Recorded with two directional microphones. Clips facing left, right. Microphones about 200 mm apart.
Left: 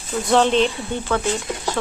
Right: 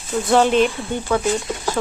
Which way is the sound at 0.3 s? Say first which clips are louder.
Right 1 dB; 5° right (ahead or behind).